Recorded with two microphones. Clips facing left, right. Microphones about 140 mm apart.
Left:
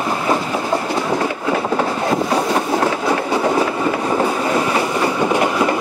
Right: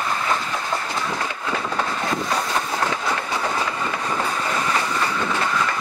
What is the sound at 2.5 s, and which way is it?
Train, 35° left (ahead or behind).